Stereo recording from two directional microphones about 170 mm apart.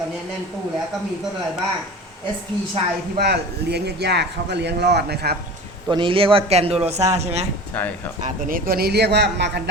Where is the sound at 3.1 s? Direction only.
75° right (ahead or behind).